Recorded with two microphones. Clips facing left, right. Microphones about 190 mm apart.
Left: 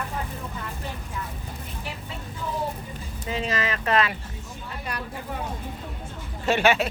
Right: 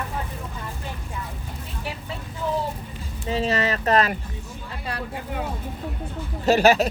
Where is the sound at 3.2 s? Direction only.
35° right (ahead or behind).